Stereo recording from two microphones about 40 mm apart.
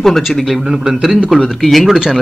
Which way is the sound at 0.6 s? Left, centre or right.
Centre.